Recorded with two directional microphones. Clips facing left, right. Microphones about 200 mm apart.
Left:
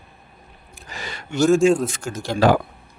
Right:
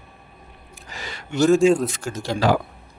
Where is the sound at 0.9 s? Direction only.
50° left (ahead or behind).